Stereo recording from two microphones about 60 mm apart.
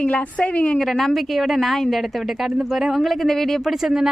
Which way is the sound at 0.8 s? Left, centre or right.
Centre.